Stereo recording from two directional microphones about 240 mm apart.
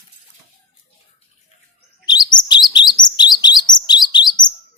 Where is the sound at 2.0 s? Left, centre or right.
Centre.